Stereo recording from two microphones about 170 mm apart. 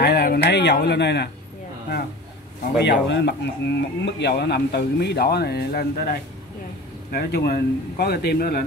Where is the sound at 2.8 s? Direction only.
90° left.